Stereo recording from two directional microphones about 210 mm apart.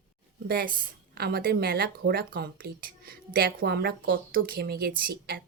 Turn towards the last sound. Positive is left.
turn(degrees=-45)  # may be behind; listen again after turning